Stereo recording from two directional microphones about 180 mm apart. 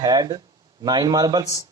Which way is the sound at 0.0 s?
25° right (ahead or behind).